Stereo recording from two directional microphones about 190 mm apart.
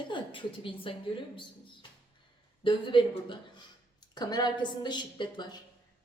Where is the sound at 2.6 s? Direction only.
25° left (ahead or behind).